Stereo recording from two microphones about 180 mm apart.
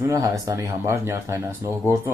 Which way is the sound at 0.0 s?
15° right (ahead or behind).